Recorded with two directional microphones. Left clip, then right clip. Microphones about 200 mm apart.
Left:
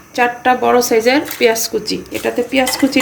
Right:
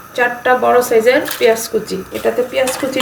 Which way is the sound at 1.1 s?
60° left (ahead or behind).